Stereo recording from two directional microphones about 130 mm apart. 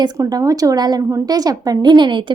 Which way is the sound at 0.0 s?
30° right (ahead or behind).